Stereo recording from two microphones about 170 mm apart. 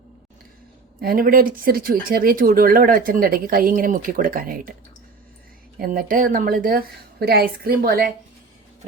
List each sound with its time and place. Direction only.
1.0 s speech: 60° right (ahead or behind)
5.8 s speech: 55° right (ahead or behind)